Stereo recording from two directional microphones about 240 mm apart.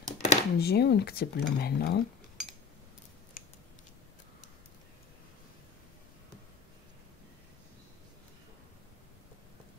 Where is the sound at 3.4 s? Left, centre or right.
Left.